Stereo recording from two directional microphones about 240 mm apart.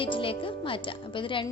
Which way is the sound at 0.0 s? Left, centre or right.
Left.